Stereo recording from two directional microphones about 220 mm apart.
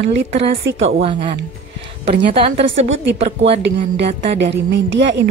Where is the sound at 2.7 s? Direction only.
60° right (ahead or behind).